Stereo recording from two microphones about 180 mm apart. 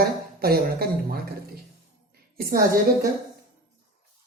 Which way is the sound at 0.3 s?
60° right (ahead or behind).